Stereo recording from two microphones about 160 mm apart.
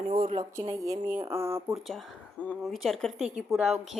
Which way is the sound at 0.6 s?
20° right (ahead or behind).